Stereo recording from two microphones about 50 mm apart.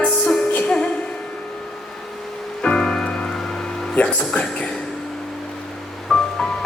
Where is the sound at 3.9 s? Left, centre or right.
Left.